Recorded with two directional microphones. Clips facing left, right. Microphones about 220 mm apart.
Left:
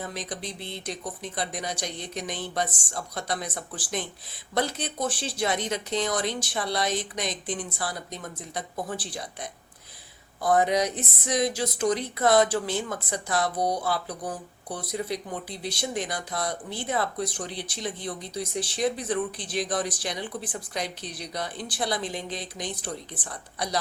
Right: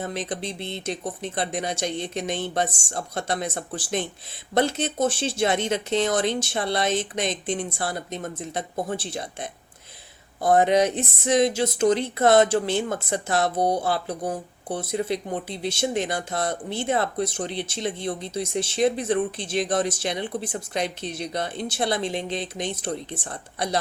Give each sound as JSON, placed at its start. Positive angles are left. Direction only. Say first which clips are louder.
{"t": 0.1, "sound": "speech", "louder": "right 5 dB", "side_deg": -25}